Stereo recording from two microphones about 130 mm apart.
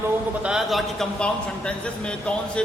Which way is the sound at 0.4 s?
5° right (ahead or behind).